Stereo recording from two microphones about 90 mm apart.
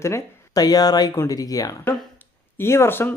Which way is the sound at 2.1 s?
25° left (ahead or behind).